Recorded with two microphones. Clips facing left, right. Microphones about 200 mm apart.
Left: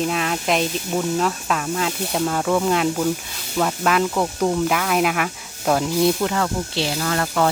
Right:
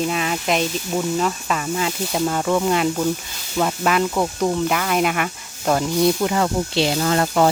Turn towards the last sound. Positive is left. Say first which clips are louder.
# right 3 dB
turn(degrees=-20)  # may be behind; listen again after turning